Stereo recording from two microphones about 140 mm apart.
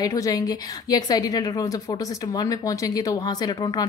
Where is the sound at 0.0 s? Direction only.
25° left (ahead or behind).